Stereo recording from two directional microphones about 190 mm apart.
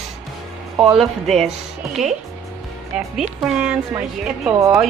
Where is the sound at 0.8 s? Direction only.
Centre (ahead or behind).